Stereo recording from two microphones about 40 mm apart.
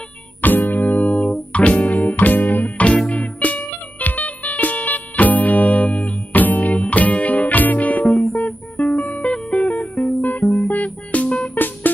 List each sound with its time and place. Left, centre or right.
0.4 s music: left
3.1 s music: left
10.2 s music: left
10.7 s music: left
11.5 s music: left